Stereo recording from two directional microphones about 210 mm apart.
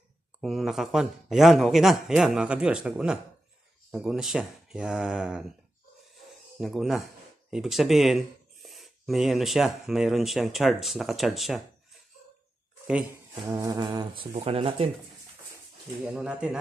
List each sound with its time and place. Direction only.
0.4 s speech: centre (ahead or behind)
6.6 s speech: centre (ahead or behind)
12.8 s speech: 5° right (ahead or behind)
13.5 s speech: 20° right (ahead or behind)
16.1 s speech: 5° right (ahead or behind)